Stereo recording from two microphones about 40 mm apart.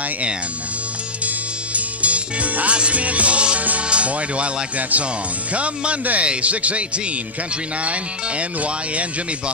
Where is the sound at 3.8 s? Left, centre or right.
Right.